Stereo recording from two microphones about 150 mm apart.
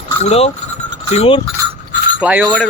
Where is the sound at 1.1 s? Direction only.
40° left (ahead or behind).